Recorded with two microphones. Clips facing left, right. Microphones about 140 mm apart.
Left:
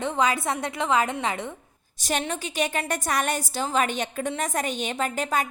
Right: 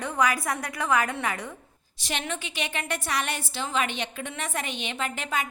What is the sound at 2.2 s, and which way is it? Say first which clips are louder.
A woman's voice: left 5 dB; 40° left (ahead or behind).